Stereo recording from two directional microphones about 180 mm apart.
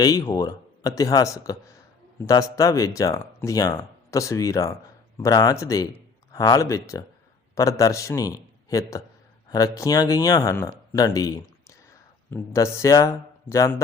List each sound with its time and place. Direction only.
0.0 s speech: 20° left (ahead or behind)
9.5 s speech: 20° left (ahead or behind)